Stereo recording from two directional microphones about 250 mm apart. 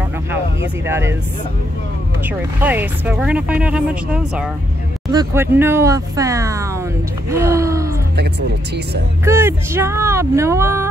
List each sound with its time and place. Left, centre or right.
0.8 s speech: centre
2.2 s speech: centre
9.2 s speech: centre